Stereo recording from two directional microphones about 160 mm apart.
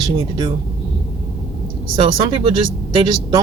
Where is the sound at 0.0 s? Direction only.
25° right (ahead or behind).